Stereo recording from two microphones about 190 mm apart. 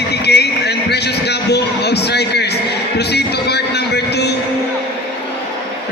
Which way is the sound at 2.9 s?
60° left (ahead or behind).